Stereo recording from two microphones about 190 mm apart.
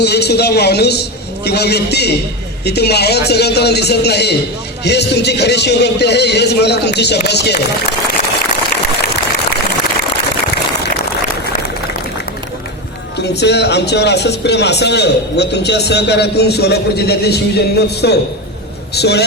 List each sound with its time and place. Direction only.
0.0 s speech: 60° left (ahead or behind)
13.2 s speech: 60° left (ahead or behind)